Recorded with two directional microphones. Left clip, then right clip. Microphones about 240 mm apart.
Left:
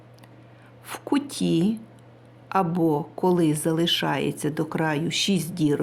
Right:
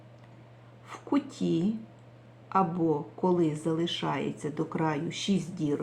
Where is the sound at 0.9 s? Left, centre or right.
Left.